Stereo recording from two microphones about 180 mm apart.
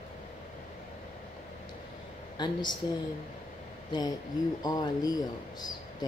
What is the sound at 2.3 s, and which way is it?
Speech, 25° left (ahead or behind).